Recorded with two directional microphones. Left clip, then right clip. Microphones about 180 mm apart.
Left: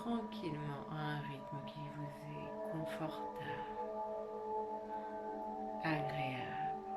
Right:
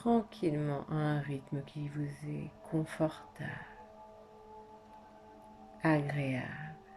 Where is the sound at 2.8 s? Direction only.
30° right (ahead or behind).